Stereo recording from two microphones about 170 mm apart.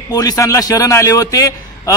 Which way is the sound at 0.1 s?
20° left (ahead or behind).